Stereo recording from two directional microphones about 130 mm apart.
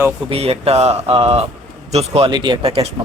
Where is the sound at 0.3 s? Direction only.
50° right (ahead or behind).